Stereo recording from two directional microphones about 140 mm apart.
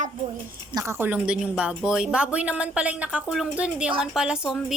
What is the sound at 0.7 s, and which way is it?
A woman's voice, 20° right (ahead or behind).